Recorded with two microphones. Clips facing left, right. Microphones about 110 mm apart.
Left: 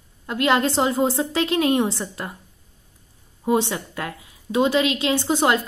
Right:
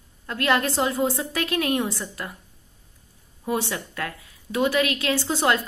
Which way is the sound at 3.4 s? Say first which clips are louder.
Left 5 dB; 20° left (ahead or behind).